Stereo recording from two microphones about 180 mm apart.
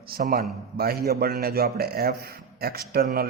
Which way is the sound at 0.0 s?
55° right (ahead or behind).